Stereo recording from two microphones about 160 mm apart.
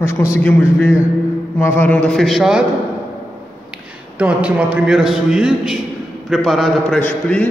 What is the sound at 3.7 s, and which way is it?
A man's voice, 10° right (ahead or behind).